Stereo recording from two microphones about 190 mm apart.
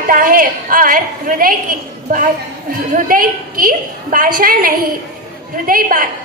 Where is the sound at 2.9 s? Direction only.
45° right (ahead or behind).